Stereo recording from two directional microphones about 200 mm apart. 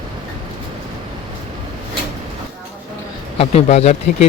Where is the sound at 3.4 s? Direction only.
30° left (ahead or behind).